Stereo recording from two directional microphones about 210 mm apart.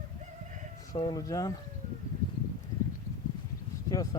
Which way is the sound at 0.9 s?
20° left (ahead or behind).